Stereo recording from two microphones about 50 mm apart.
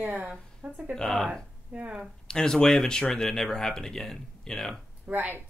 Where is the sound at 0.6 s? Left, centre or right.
Right.